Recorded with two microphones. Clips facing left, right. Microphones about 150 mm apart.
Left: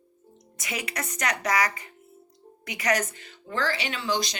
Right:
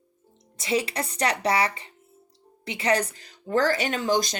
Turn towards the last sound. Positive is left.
turn(degrees=-45)  # may be behind; listen again after turning